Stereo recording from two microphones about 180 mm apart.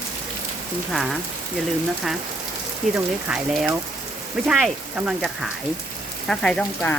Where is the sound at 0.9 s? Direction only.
Centre (ahead or behind).